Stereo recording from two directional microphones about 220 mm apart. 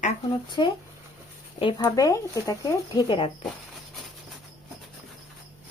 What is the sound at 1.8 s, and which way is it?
Speech, 15° left (ahead or behind).